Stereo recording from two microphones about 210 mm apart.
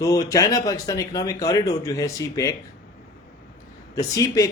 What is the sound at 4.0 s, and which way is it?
Speech, 15° left (ahead or behind).